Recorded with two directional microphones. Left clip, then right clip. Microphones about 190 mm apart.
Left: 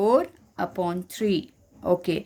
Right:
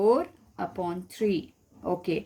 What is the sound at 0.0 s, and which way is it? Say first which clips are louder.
Speech: left 2 dB; 40° left (ahead or behind).